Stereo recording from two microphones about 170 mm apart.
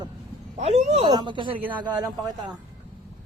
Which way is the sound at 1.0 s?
25° right (ahead or behind).